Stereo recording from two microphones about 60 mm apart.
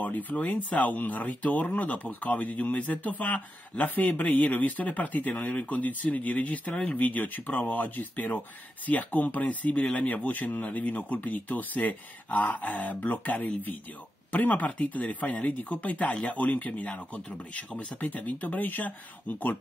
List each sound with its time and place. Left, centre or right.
0.0 s speech: left